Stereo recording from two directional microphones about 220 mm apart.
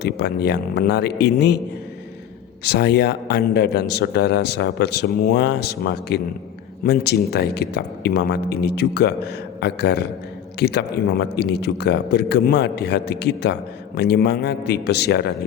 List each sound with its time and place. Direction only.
0.0 s a man's voice: 50° left (ahead or behind)
2.6 s a man's voice: 50° left (ahead or behind)